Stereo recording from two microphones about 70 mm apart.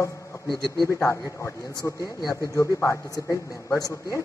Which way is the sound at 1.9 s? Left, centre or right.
Left.